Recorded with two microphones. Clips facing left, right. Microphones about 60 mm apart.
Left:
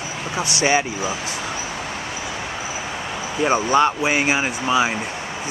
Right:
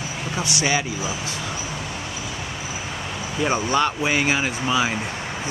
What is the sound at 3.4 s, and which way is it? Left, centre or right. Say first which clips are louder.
Speech: left 4 dB; centre.